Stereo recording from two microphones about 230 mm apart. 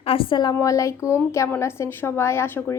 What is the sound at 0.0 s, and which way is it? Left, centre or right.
A woman's voice, left.